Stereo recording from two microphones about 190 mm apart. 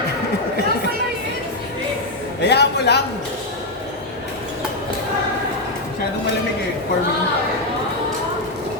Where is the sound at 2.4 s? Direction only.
60° left (ahead or behind).